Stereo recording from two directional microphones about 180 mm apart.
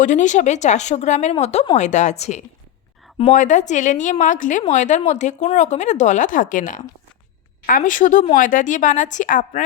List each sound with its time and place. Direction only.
0.0 s a woman's voice: 45° left (ahead or behind)